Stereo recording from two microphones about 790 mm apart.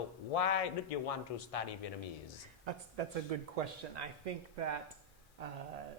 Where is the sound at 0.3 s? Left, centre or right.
Left.